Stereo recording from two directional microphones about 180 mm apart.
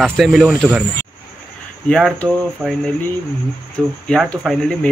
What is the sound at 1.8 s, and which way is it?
Speech, 5° left (ahead or behind).